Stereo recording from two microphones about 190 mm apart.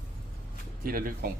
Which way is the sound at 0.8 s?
50° right (ahead or behind).